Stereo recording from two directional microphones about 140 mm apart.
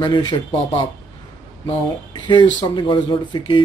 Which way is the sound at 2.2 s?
35° left (ahead or behind).